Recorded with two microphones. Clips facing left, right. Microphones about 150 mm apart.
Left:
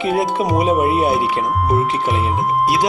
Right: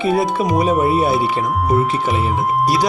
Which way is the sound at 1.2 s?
Centre (ahead or behind).